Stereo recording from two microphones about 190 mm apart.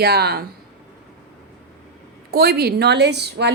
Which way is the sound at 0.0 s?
55° right (ahead or behind).